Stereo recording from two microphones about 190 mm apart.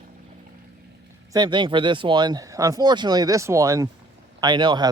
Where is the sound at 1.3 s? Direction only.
25° right (ahead or behind).